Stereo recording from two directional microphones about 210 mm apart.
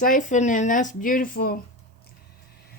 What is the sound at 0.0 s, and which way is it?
Speech, 40° left (ahead or behind).